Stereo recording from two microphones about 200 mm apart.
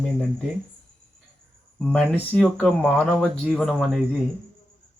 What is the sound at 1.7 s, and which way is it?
Speech, 5° left (ahead or behind).